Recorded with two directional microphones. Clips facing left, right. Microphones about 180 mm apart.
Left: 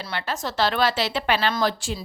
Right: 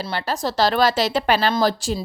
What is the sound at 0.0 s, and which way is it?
Speech, 35° right (ahead or behind).